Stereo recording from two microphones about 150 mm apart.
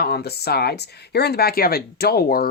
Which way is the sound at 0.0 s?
90° left.